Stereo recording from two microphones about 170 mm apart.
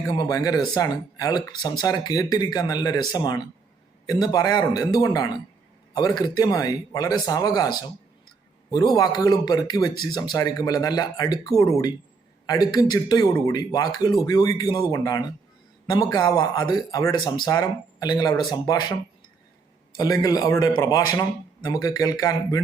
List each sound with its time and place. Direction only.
0.1 s speech: 20° left (ahead or behind)
20.0 s speech: 20° left (ahead or behind)